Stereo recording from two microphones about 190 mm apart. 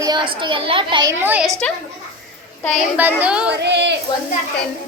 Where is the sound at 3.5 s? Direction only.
65° right (ahead or behind).